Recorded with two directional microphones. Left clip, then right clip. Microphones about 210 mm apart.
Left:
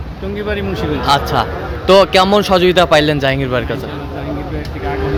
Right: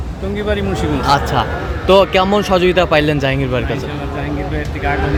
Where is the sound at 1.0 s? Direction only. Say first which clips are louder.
Left 1 dB; centre (ahead or behind).